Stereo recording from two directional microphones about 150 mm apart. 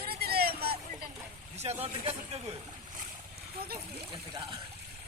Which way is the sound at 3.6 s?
90° right.